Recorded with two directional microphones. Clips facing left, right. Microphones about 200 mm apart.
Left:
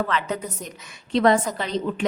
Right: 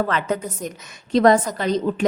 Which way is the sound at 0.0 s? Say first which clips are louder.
Right 3 dB; 45° right (ahead or behind).